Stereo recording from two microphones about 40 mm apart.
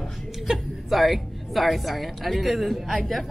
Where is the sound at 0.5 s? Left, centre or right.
Centre.